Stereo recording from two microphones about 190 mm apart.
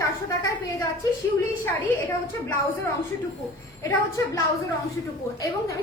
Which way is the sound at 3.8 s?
15° left (ahead or behind).